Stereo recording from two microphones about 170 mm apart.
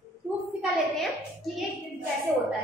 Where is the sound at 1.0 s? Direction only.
Centre (ahead or behind).